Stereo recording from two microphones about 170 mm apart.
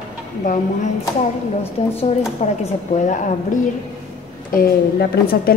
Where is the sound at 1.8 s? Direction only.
40° left (ahead or behind).